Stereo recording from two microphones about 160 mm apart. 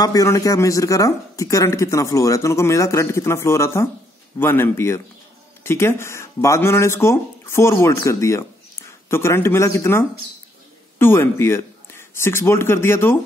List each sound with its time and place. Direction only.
0.0 s speech: 20° left (ahead or behind)